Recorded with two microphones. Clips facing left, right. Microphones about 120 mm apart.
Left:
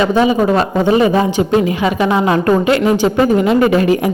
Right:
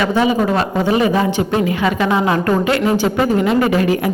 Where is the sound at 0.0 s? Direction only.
20° left (ahead or behind).